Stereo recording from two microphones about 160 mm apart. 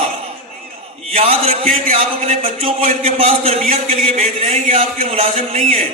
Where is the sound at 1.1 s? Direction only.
40° right (ahead or behind).